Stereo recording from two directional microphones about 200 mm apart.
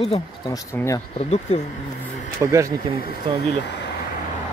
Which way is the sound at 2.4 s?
15° right (ahead or behind).